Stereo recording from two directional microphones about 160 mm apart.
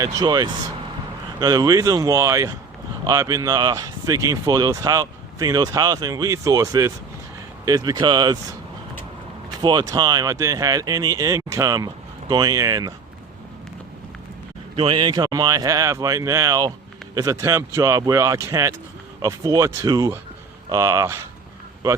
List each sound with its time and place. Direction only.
0.0 s speech: 25° right (ahead or behind)
9.6 s speech: 25° right (ahead or behind)
14.8 s speech: 30° right (ahead or behind)